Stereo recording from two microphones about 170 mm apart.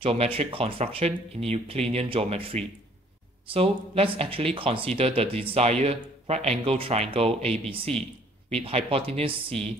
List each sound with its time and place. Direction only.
0.0 s speech: 35° right (ahead or behind)